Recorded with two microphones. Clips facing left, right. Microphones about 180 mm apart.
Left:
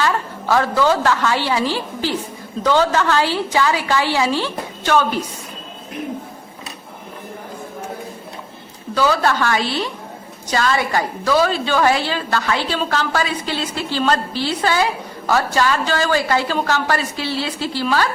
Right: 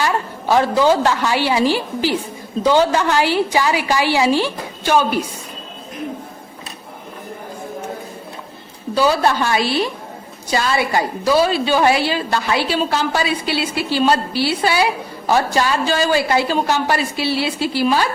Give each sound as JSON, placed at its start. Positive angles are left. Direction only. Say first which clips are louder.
{"t": 0.0, "sound": "a woman's voice", "louder": "right 1 dB", "side_deg": -15}
{"t": 9.0, "sound": "a woman's voice", "louder": "right 1 dB", "side_deg": -15}